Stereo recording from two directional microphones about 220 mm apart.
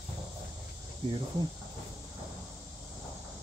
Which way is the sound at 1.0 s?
20° right (ahead or behind).